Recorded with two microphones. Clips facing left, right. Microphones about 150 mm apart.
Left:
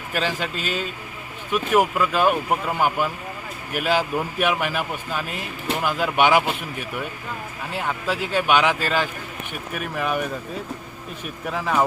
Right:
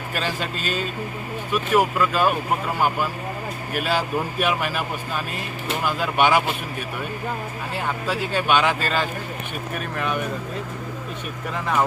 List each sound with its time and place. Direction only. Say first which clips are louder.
0.1 s speech: left 2 dB; 15° left (ahead or behind)
3.8 s speech: left 2 dB; 15° left (ahead or behind)
8.2 s speech: left 1 dB; 10° left (ahead or behind)
11.5 s speech: left 1 dB; centre (ahead or behind)